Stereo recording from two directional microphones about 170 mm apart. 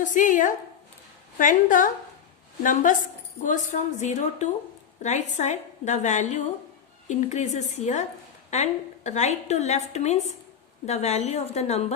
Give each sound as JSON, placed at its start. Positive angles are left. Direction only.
{"t": 0.0, "sound": "a woman's voice", "side_deg": 50}
{"t": 3.4, "sound": "a woman's voice", "side_deg": 45}